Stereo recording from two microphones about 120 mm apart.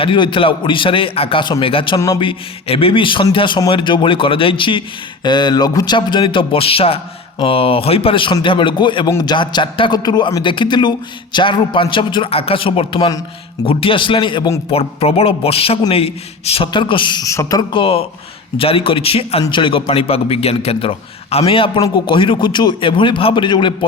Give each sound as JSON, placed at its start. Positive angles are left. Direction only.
{"t": 0.0, "sound": "speech", "side_deg": 45}
{"t": 14.7, "sound": "speech", "side_deg": 55}
{"t": 17.2, "sound": "speech", "side_deg": 30}
{"t": 19.4, "sound": "speech", "side_deg": 40}
{"t": 21.8, "sound": "speech", "side_deg": 40}